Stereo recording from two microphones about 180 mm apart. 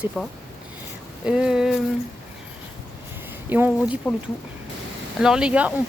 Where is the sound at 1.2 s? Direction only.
5° right (ahead or behind).